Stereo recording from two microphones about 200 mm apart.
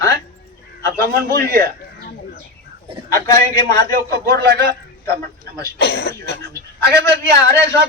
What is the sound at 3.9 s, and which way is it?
A man's voice, 55° right (ahead or behind).